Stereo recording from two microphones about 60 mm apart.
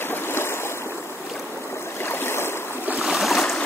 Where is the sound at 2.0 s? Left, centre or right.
Left.